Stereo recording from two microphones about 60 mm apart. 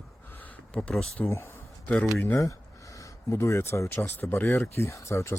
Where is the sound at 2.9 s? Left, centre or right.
Left.